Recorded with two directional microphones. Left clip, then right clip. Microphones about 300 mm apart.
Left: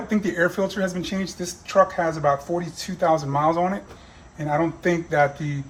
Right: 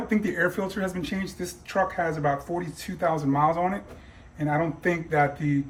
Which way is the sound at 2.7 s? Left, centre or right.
Centre.